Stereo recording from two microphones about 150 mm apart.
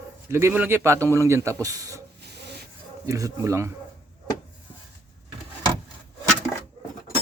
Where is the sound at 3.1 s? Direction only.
20° right (ahead or behind).